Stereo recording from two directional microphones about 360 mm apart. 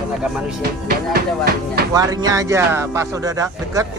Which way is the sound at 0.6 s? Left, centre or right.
Right.